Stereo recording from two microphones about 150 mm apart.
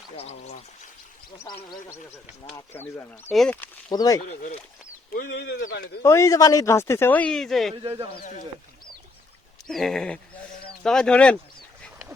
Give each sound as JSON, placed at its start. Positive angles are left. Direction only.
{"t": 0.2, "sound": "speech", "side_deg": 45}
{"t": 2.6, "sound": "speech", "side_deg": 15}
{"t": 3.9, "sound": "speech", "side_deg": 25}
{"t": 5.1, "sound": "speech", "side_deg": 85}
{"t": 6.0, "sound": "speech", "side_deg": 20}
{"t": 9.6, "sound": "sheep", "side_deg": 0}